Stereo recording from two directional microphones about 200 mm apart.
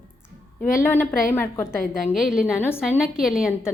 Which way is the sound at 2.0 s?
Centre (ahead or behind).